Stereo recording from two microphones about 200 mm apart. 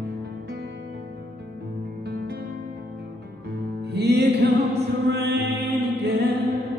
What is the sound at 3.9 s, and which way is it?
Music, 55° right (ahead or behind).